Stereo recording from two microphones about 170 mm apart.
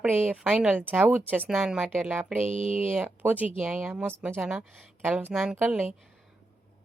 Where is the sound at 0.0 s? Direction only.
10° right (ahead or behind).